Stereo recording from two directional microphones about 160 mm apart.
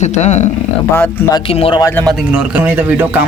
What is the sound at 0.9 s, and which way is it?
Speech, 15° left (ahead or behind).